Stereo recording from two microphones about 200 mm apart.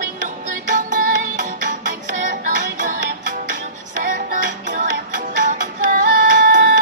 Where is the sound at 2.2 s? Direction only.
40° right (ahead or behind).